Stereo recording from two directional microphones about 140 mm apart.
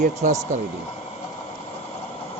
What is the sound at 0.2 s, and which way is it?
Speech, 60° right (ahead or behind).